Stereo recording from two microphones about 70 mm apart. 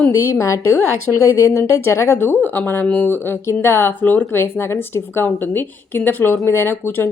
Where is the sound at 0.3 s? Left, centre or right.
Left.